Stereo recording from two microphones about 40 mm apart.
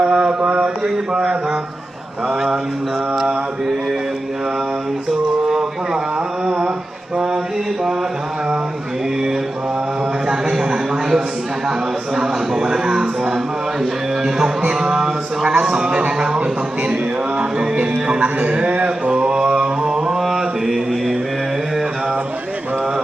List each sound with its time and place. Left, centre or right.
0.0 s mantra: right
5.5 s a sound: centre
10.2 s a sound: centre
12.1 s a man's voice: centre
14.3 s music: centre
14.8 s a sound: centre
16.9 s music: right
17.7 s music: right
18.5 s mantra: right; by 21.2 s centre